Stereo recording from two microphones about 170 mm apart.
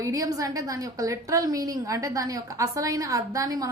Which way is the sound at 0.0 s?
20° right (ahead or behind).